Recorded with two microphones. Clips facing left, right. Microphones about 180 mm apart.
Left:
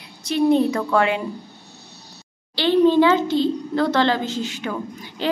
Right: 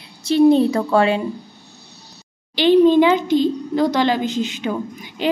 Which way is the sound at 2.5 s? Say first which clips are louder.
Right 3 dB; 15° right (ahead or behind).